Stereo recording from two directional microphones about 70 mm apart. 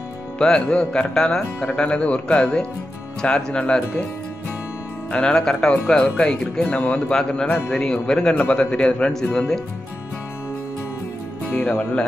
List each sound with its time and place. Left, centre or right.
0.4 s speech: centre
5.1 s speech: centre
11.5 s speech: centre